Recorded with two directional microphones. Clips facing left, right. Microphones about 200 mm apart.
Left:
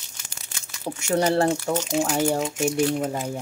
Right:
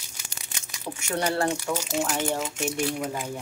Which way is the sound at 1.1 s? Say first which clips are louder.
Left 5 dB; 30° left (ahead or behind).